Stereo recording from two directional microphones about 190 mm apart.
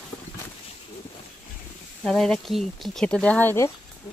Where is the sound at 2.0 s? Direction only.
5° left (ahead or behind).